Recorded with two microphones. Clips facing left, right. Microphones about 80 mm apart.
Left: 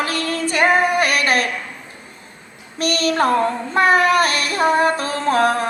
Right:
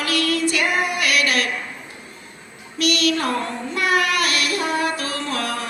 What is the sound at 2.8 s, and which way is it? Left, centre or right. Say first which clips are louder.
Child singing: left 2 dB; left.